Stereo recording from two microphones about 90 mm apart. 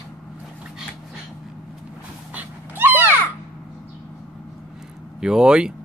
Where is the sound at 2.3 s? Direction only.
20° right (ahead or behind).